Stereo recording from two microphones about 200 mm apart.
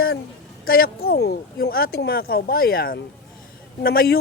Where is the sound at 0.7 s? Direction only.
50° left (ahead or behind).